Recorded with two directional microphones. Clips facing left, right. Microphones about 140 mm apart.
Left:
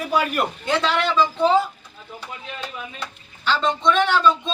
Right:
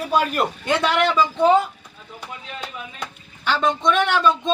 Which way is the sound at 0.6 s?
20° right (ahead or behind).